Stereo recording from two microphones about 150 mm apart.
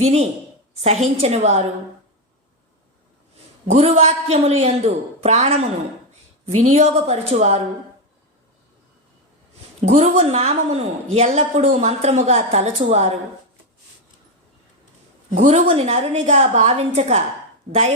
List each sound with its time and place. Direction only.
0.0 s a woman's voice: 50° right (ahead or behind)
3.7 s a woman's voice: 45° right (ahead or behind)
9.8 s a woman's voice: 45° right (ahead or behind)
15.3 s a woman's voice: 55° right (ahead or behind)